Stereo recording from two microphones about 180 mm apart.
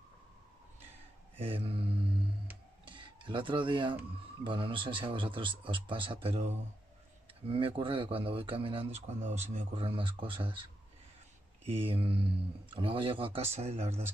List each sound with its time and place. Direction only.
1.4 s mantra: 30° right (ahead or behind)
2.8 s a sound: 25° right (ahead or behind)
4.5 s speech: 30° right (ahead or behind)
11.6 s speech: 30° right (ahead or behind)